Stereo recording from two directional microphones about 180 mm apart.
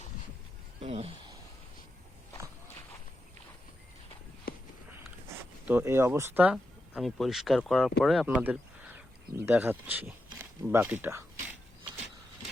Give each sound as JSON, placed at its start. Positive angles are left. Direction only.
{"t": 0.8, "sound": "speech", "side_deg": -35}
{"t": 5.6, "sound": "speech", "side_deg": -10}